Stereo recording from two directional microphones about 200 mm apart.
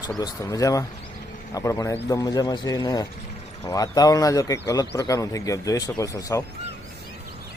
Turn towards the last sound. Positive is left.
turn(degrees=15)  # may be behind; listen again after turning